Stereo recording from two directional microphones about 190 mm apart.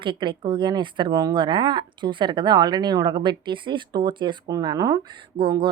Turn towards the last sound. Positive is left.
turn(degrees=-25)  # may be behind; listen again after turning